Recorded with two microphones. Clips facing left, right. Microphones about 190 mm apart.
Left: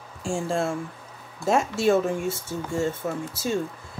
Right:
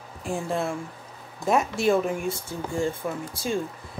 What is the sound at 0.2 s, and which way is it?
Speech, 30° left (ahead or behind).